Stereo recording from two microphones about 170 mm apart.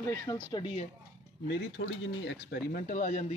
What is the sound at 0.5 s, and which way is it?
Speech, 30° left (ahead or behind).